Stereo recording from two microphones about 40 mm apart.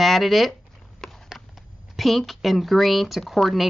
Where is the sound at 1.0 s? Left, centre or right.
Centre.